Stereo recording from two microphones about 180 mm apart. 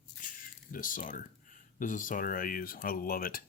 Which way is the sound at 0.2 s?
45° left (ahead or behind).